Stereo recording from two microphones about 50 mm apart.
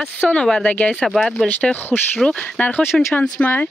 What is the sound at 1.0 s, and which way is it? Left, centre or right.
Speech, centre.